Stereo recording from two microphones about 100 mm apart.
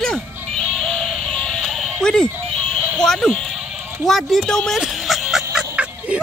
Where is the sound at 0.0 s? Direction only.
5° left (ahead or behind).